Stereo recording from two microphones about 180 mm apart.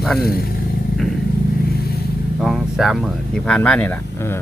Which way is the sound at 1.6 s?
60° left (ahead or behind).